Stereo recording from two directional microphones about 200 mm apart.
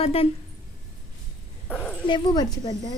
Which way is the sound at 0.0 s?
30° left (ahead or behind).